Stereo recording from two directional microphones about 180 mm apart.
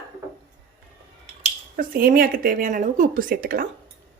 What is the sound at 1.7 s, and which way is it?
Speech, 55° right (ahead or behind).